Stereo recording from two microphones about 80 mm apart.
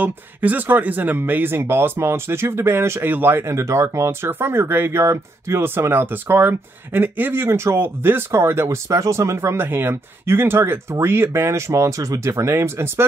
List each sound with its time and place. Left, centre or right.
0.0 s speech: right